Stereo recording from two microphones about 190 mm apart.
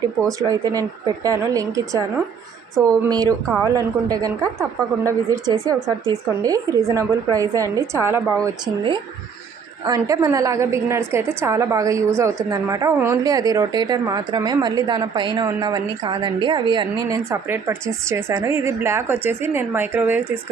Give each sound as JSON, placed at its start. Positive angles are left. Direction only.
{"t": 0.3, "sound": "a woman's voice", "side_deg": -15}
{"t": 8.6, "sound": "a woman's voice", "side_deg": -25}